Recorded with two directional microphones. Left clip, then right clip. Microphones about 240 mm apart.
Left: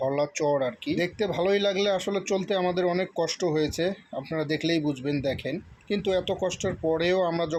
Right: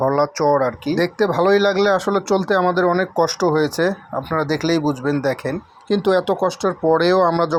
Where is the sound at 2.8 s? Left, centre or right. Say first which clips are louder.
Right 9 dB; right.